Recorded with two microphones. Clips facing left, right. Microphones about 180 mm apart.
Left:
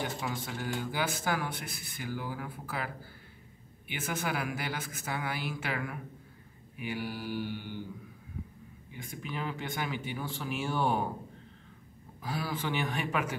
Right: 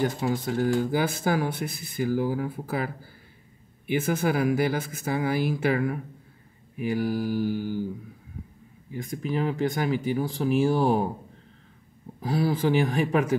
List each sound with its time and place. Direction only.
0.0 s speech: 40° right (ahead or behind)
8.9 s speech: 40° right (ahead or behind)
12.2 s speech: 40° right (ahead or behind)